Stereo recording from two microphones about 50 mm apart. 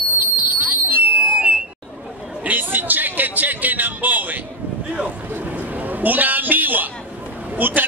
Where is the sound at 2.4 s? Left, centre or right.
Right.